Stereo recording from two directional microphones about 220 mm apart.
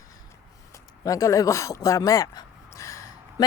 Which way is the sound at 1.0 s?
15° left (ahead or behind).